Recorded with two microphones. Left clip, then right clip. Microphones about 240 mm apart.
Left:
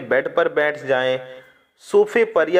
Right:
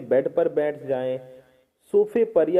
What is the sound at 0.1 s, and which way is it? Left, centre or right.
Speech, centre.